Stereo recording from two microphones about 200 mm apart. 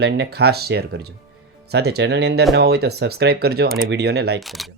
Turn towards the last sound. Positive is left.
turn(degrees=0)  # may be behind; listen again after turning